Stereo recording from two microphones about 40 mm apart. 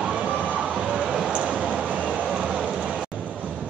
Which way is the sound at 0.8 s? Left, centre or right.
Right.